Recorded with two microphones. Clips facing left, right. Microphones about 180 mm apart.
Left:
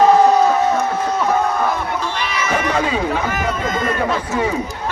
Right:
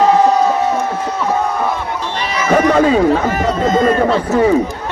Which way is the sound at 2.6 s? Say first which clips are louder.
Right 9 dB; 40° right (ahead or behind).